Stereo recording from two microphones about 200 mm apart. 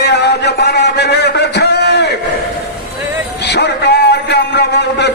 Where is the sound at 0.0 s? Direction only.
55° left (ahead or behind).